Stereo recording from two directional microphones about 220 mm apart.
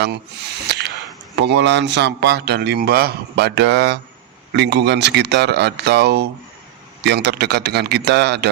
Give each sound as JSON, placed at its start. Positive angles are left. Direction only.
{"t": 0.0, "sound": "speech", "side_deg": -50}